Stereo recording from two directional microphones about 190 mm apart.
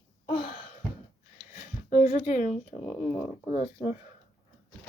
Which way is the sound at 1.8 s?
45° left (ahead or behind).